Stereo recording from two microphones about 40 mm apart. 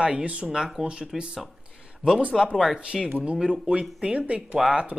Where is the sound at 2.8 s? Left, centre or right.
Centre.